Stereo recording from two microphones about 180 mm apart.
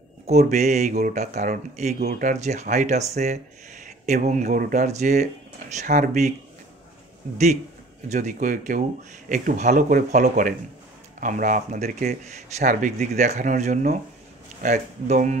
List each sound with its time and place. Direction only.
0.3 s speech: 40° right (ahead or behind)
8.1 s speech: 40° right (ahead or behind)